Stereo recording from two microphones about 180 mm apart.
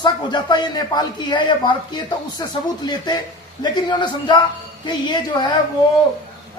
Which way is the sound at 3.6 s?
25° left (ahead or behind).